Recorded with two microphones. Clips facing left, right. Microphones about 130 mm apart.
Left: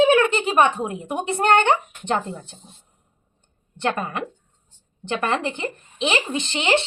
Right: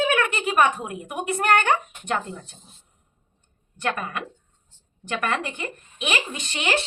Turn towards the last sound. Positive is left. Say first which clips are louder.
# left 5 dB
turn(degrees=25)  # may be behind; listen again after turning